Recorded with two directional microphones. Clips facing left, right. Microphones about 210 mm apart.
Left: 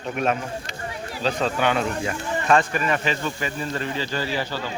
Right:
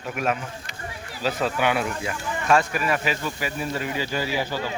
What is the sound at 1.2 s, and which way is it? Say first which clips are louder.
Speech: left 1 dB; 10° right (ahead or behind).